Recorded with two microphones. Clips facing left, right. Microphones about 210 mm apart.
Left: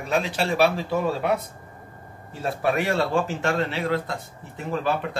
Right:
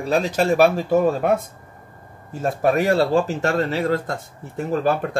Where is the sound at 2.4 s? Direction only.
40° right (ahead or behind).